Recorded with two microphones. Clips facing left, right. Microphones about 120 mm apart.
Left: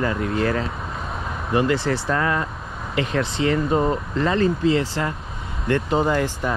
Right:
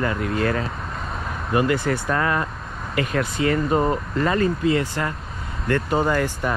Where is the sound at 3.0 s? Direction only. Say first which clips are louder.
Even; 25° left (ahead or behind).